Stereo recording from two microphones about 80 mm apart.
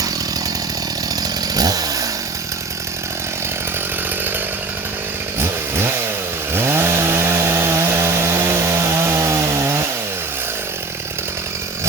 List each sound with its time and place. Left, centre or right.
1.5 s chainsaw: right
5.4 s chainsaw: right